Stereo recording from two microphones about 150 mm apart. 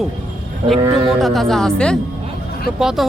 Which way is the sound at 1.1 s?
Centre (ahead or behind).